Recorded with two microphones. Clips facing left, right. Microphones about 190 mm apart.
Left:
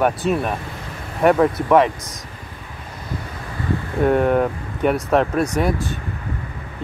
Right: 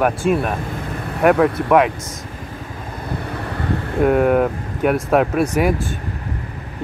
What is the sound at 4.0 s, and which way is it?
Speech, 5° right (ahead or behind).